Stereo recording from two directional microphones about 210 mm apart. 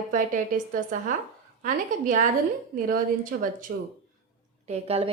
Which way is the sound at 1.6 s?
40° right (ahead or behind).